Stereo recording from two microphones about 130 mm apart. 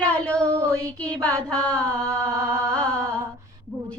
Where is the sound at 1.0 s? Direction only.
10° left (ahead or behind).